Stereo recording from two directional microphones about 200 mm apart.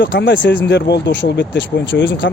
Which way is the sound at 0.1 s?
60° left (ahead or behind).